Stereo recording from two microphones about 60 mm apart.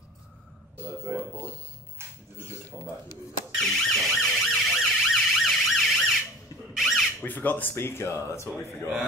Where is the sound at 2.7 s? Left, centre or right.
Centre.